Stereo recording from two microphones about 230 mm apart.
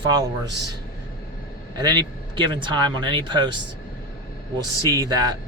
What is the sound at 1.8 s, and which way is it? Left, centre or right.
Speech, centre.